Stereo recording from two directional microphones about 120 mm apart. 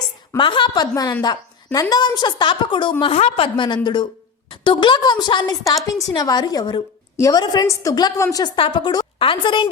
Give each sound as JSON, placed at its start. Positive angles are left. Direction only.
{"t": 0.3, "sound": "a woman's voice", "side_deg": 40}
{"t": 3.0, "sound": "a woman's voice", "side_deg": 55}
{"t": 8.5, "sound": "a woman's voice", "side_deg": 45}